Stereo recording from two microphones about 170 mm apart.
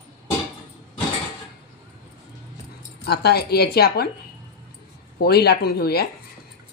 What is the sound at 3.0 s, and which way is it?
A woman's voice, 70° left (ahead or behind).